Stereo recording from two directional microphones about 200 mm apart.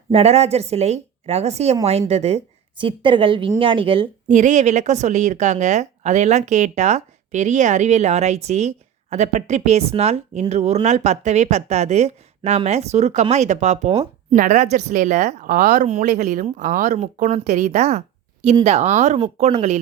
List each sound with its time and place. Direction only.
0.1 s speech: 30° right (ahead or behind)
4.3 s speech: 40° right (ahead or behind)